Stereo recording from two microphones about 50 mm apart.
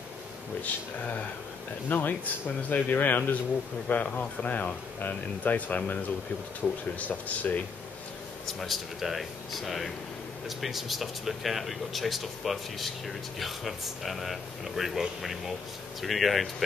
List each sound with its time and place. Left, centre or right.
1.9 s speech: left
6.6 s speech: left
7.0 s speech: left
8.5 s speech: centre